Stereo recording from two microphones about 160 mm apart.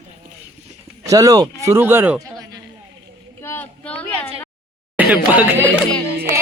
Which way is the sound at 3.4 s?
15° left (ahead or behind).